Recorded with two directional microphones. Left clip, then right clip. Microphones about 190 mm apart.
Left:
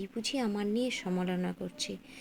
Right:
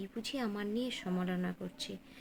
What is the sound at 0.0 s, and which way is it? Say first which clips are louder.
A woman's voice: left 5 dB; 20° left (ahead or behind).